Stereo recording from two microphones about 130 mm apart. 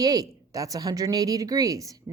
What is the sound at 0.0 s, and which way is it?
A woman's voice, 30° right (ahead or behind).